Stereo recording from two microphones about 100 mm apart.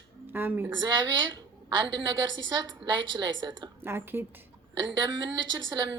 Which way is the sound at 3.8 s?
20° right (ahead or behind).